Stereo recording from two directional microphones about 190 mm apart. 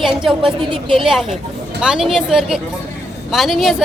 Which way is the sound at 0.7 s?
25° right (ahead or behind).